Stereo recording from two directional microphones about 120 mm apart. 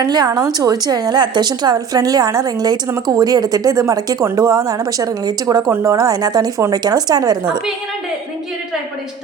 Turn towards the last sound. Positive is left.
turn(degrees=-35)  # may be behind; listen again after turning